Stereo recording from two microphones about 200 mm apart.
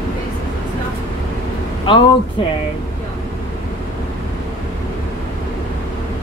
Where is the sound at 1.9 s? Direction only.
25° left (ahead or behind).